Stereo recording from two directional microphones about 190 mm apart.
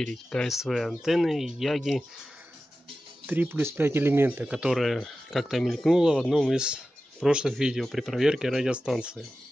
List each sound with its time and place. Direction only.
0.0 s speech: 5° left (ahead or behind)
3.3 s speech: 10° right (ahead or behind)